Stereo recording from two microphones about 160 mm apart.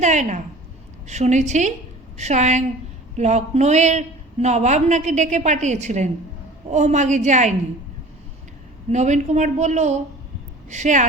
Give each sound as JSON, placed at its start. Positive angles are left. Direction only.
{"t": 0.0, "sound": "a woman's voice", "side_deg": -50}
{"t": 8.9, "sound": "a woman's voice", "side_deg": -45}